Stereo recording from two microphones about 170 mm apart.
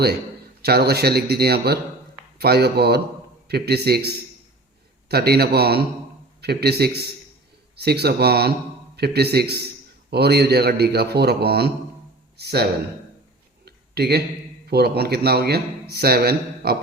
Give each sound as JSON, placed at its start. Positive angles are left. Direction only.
{"t": 0.6, "sound": "a man's voice", "side_deg": -70}
{"t": 13.7, "sound": "a sound", "side_deg": -70}
{"t": 14.7, "sound": "a man's voice", "side_deg": -70}